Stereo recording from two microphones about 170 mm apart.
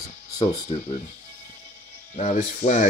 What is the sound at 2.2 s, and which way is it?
Speech, 45° left (ahead or behind).